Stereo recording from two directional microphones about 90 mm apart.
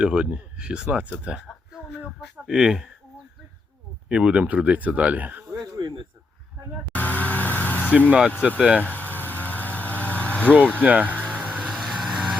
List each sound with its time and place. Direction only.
0.0 s speech: 10° right (ahead or behind)
1.2 s a sound: 10° right (ahead or behind)
2.2 s speech: 5° right (ahead or behind)
4.1 s speech: 10° right (ahead or behind)
5.7 s snake: 50° right (ahead or behind)
6.9 s vehicle: 20° left (ahead or behind)
8.4 s speech: 10° right (ahead or behind)
8.8 s vehicle: 20° left (ahead or behind)
10.8 s speech: 15° right (ahead or behind)
11.3 s vehicle: 10° left (ahead or behind)